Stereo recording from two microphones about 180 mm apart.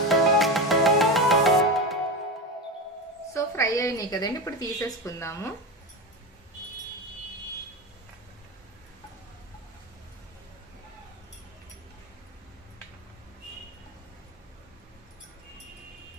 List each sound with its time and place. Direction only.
0.1 s music: centre (ahead or behind)
3.3 s a woman's voice: 15° left (ahead or behind)